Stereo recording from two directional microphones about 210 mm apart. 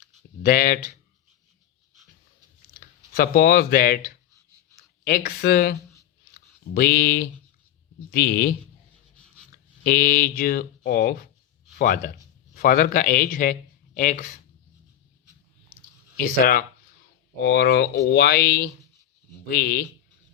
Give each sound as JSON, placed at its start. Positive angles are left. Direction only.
{"t": 0.4, "sound": "speech", "side_deg": 40}
{"t": 3.1, "sound": "speech", "side_deg": 45}
{"t": 6.7, "sound": "speech", "side_deg": 45}
{"t": 9.8, "sound": "a man's voice", "side_deg": 40}
{"t": 16.1, "sound": "speech", "side_deg": 40}